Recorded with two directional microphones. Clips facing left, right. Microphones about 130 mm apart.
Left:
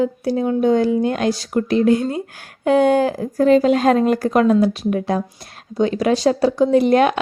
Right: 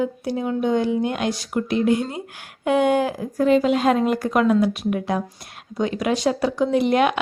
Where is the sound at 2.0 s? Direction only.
20° right (ahead or behind).